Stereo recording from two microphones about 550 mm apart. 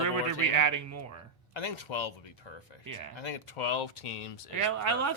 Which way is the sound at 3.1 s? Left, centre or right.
Left.